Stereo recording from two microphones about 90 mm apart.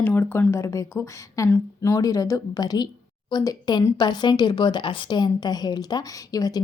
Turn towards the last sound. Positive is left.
turn(degrees=45)  # may be behind; listen again after turning